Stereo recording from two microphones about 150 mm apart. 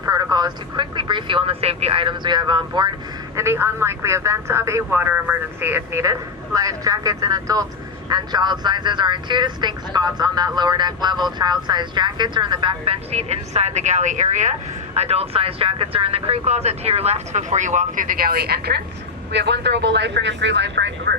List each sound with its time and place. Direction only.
0.0 s speech: 25° right (ahead or behind)
3.3 s speech: 15° right (ahead or behind); by 14.5 s 55° right (ahead or behind)
14.9 s speech: 45° right (ahead or behind); by 18.8 s 90° right
20.2 s speech: 90° right